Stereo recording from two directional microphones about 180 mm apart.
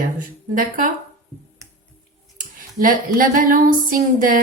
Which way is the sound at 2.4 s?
50° right (ahead or behind).